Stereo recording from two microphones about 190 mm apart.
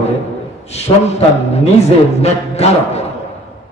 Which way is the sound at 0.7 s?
35° left (ahead or behind).